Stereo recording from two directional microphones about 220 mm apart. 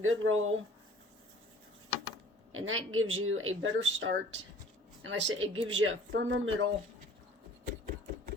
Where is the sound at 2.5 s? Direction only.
65° right (ahead or behind).